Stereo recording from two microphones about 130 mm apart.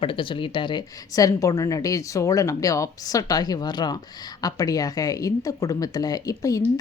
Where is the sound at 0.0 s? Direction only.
40° left (ahead or behind).